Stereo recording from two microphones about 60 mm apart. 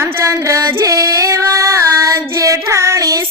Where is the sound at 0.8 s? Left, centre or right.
Right.